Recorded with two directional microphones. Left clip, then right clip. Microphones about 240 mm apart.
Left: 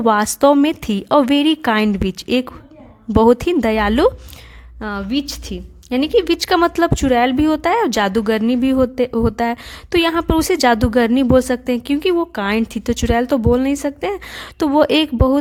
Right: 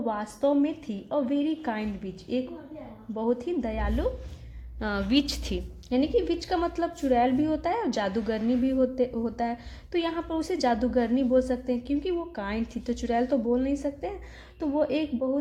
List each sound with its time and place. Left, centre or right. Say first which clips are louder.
0.0 s a woman's voice: left 14 dB; left
4.8 s a woman's voice: left 4 dB; left